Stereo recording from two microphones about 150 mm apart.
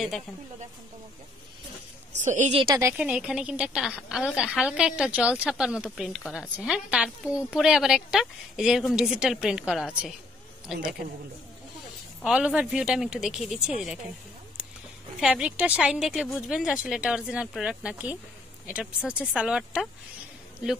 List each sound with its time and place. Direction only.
2.2 s a woman's voice: 55° right (ahead or behind)
2.6 s speech: 25° right (ahead or behind)
2.9 s speech: 5° right (ahead or behind)
12.2 s speech: 5° right (ahead or behind)
15.1 s speech: 5° right (ahead or behind)